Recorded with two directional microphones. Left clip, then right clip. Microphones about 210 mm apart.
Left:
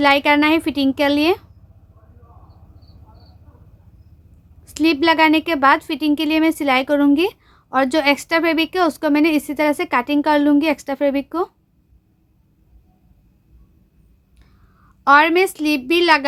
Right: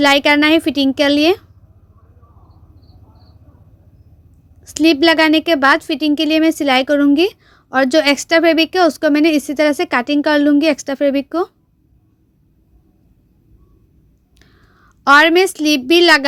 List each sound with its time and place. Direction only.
0.0 s a woman's voice: 15° right (ahead or behind)
4.6 s a woman's voice: 15° right (ahead or behind)
14.3 s a woman's voice: 20° right (ahead or behind)